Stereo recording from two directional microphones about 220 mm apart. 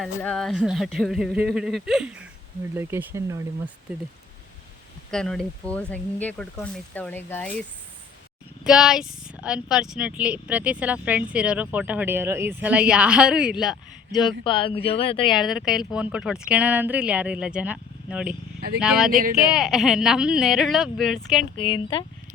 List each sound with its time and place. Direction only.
0.0 s speech: 5° left (ahead or behind); by 3.4 s 15° right (ahead or behind)
5.1 s speech: 5° left (ahead or behind)
8.6 s speech: centre (ahead or behind)
14.4 s speech: 25° left (ahead or behind)
15.3 s speech: centre (ahead or behind)
21.5 s speech: 25° left (ahead or behind)